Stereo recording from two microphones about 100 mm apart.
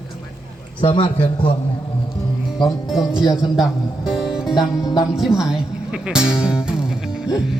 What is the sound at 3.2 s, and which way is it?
Music, 40° left (ahead or behind).